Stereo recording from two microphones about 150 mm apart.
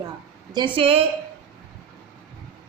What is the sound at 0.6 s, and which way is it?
Speech, 35° right (ahead or behind).